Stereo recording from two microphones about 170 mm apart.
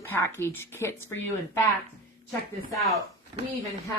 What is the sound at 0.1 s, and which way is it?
A woman's voice, 15° left (ahead or behind).